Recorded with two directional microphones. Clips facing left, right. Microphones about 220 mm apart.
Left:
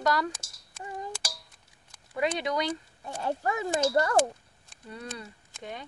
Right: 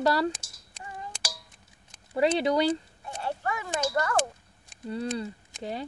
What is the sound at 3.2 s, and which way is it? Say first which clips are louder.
Speech: left 3 dB; 35° left (ahead or behind).